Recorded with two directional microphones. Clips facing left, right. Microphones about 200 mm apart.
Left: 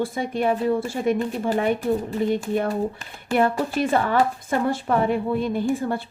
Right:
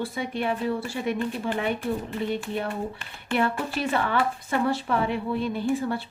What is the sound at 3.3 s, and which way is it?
A woman's voice, 45° left (ahead or behind).